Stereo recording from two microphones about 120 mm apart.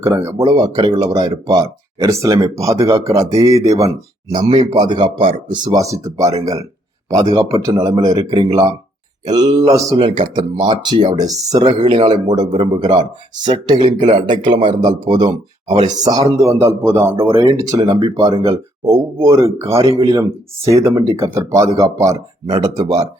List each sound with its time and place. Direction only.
0.0 s speech: 25° right (ahead or behind)
4.4 s speech: 40° right (ahead or behind)
10.0 s speech: 50° right (ahead or behind); by 23.0 s 30° right (ahead or behind)